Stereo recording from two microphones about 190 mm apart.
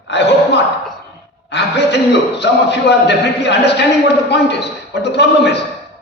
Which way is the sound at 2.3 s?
65° left (ahead or behind).